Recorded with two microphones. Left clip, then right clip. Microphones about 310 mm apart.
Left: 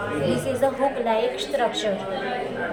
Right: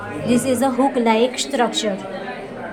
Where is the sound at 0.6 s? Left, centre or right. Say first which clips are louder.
Right 2 dB; right.